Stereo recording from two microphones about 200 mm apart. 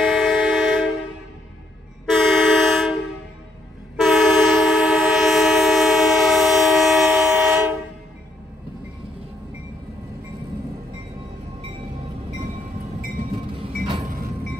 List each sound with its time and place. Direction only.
0.0 s train: centre (ahead or behind)
2.0 s vehicle: centre (ahead or behind)
3.9 s train: centre (ahead or behind)
14.0 s train: 40° right (ahead or behind)